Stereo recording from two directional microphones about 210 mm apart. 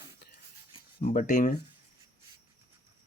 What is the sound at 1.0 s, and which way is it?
Speech, 35° left (ahead or behind).